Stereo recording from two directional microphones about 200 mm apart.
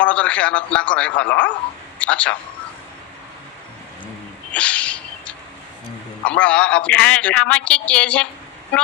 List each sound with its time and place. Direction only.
0.0 s a man's voice: 5° left (ahead or behind)
4.5 s a sound: 5° left (ahead or behind)
6.2 s a man's voice: 5° left (ahead or behind)